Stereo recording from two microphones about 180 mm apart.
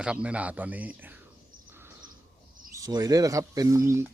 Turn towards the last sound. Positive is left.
turn(degrees=-15)  # may be behind; listen again after turning